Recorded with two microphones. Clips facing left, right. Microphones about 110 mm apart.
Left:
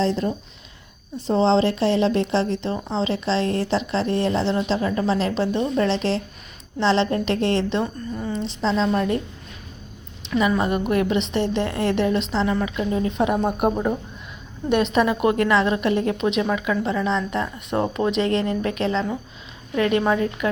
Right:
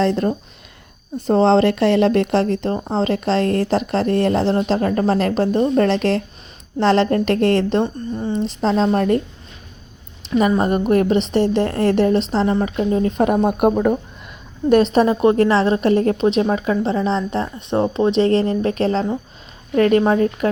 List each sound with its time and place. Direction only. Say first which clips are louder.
0.0 s speech: right 4 dB; 55° right (ahead or behind)
8.1 s a woman's voice: right 5 dB; 25° right (ahead or behind)
8.4 s speech: right 3 dB; 45° right (ahead or behind)
10.2 s a woman's voice: right 4 dB; 40° right (ahead or behind)
14.7 s a woman's voice: right 5 dB; 35° right (ahead or behind)